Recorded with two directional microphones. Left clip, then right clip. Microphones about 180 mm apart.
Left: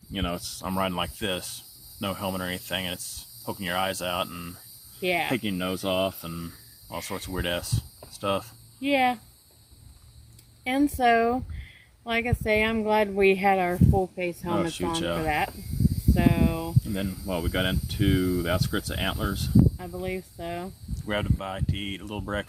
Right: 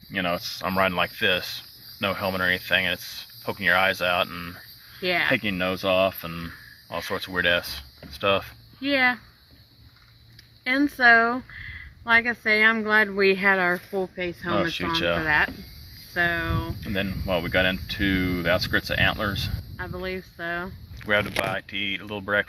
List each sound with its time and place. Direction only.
0.1 s speech: centre (ahead or behind)
4.9 s speech: 25° left (ahead or behind)
5.3 s speech: centre (ahead or behind)
8.8 s speech: 25° left (ahead or behind)
10.6 s speech: 25° left (ahead or behind)
14.5 s speech: centre (ahead or behind)
15.2 s speech: 25° left (ahead or behind)
16.9 s speech: centre (ahead or behind)
20.0 s speech: 25° left (ahead or behind)
20.9 s speech: 5° right (ahead or behind)